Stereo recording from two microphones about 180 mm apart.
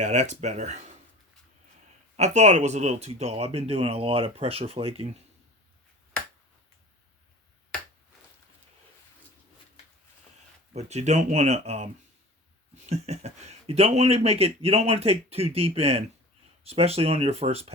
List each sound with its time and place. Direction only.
0.0 s speech: 40° right (ahead or behind)
2.1 s speech: 40° right (ahead or behind)
10.8 s speech: 40° right (ahead or behind)